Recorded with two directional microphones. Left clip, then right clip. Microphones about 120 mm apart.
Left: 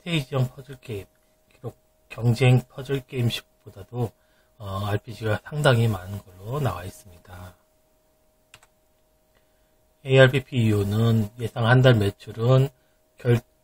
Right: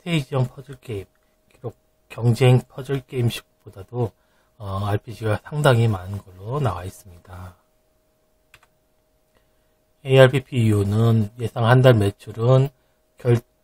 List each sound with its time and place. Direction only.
0.0 s speech: 40° right (ahead or behind)
1.5 s speech: 50° right (ahead or behind)
3.0 s speech: 35° right (ahead or behind)
10.0 s speech: 40° right (ahead or behind)